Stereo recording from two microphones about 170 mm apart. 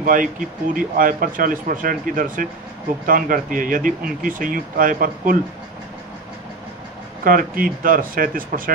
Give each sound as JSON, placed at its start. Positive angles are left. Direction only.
{"t": 0.0, "sound": "speech", "side_deg": -55}
{"t": 7.2, "sound": "speech", "side_deg": -55}